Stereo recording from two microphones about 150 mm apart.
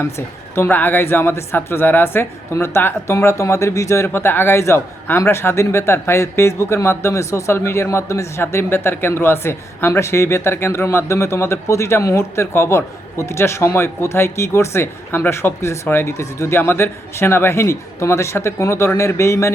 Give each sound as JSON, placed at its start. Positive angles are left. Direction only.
{"t": 0.5, "sound": "speech", "side_deg": 15}